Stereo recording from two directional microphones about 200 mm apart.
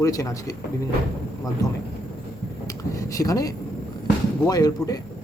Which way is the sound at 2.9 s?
15° left (ahead or behind).